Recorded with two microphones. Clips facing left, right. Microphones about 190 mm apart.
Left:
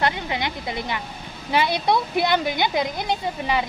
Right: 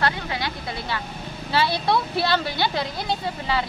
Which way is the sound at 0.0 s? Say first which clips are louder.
Left 1 dB; 20° left (ahead or behind).